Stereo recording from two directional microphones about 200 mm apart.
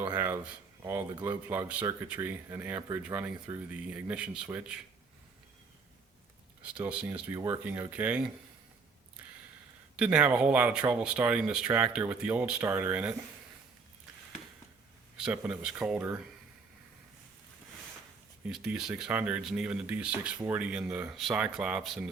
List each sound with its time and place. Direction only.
0.0 s a sound: 10° right (ahead or behind)
0.8 s speech: 15° right (ahead or behind)
6.6 s speech: 5° right (ahead or behind)
10.0 s speech: 5° right (ahead or behind)
15.2 s speech: 5° right (ahead or behind)
18.4 s speech: centre (ahead or behind)